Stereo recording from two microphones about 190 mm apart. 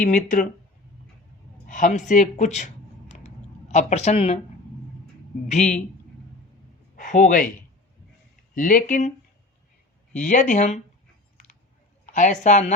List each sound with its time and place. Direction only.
0.0 s speech: 45° left (ahead or behind)
1.6 s speech: 40° left (ahead or behind)
3.7 s speech: 40° left (ahead or behind)
5.5 s speech: 40° left (ahead or behind)
6.9 s a man's voice: 45° left (ahead or behind)
8.5 s speech: 45° left (ahead or behind)
12.0 s speech: 40° left (ahead or behind)